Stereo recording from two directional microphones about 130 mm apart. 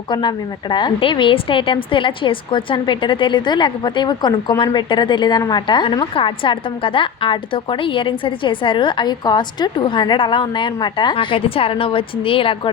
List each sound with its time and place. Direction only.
0.1 s a woman's voice: 35° left (ahead or behind)